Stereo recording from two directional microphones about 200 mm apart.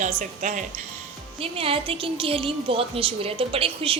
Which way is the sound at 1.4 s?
30° right (ahead or behind).